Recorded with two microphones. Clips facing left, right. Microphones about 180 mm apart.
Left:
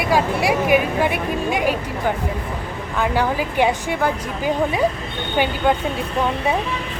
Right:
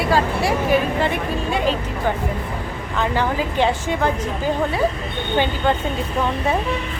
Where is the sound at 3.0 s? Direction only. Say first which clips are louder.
Left 1 dB; 10° left (ahead or behind).